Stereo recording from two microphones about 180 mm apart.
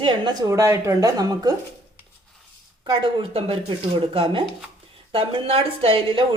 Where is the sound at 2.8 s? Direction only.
25° right (ahead or behind).